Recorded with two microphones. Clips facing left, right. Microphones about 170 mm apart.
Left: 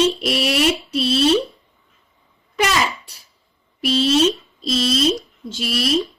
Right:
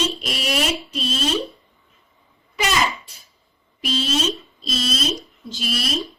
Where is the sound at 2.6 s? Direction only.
65° left (ahead or behind).